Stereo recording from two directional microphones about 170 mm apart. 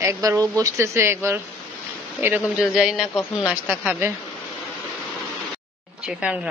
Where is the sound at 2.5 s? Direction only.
5° right (ahead or behind).